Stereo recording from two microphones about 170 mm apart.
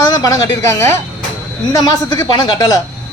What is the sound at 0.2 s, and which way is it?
Speech, 15° left (ahead or behind).